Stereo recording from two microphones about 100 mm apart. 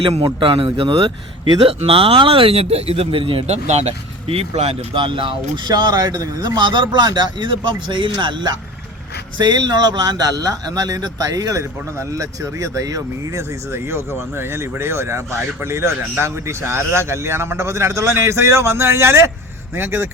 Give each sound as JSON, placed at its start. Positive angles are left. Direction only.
{"t": 0.0, "sound": "speech", "side_deg": -65}
{"t": 4.9, "sound": "speech", "side_deg": -60}